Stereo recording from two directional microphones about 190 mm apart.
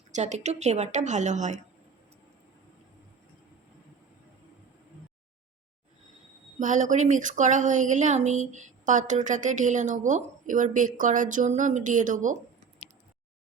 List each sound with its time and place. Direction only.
0.1 s speech: 40° right (ahead or behind)
6.6 s speech: 40° right (ahead or behind)